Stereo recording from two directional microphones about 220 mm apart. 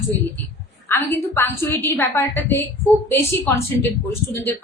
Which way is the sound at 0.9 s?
10° left (ahead or behind).